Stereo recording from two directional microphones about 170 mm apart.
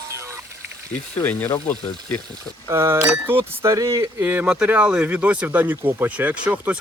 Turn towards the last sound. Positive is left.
turn(degrees=-10)  # may be behind; listen again after turning